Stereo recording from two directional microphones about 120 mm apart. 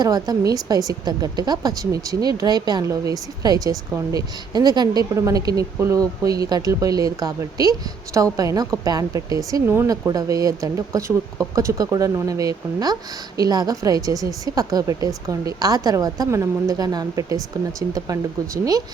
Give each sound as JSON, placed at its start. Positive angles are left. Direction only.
{"t": 0.0, "sound": "a woman's voice", "side_deg": -35}